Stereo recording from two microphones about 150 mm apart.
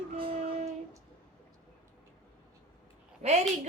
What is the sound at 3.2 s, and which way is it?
Speech, 55° right (ahead or behind).